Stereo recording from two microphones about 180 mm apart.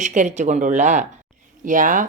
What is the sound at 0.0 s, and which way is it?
Speech, 45° right (ahead or behind).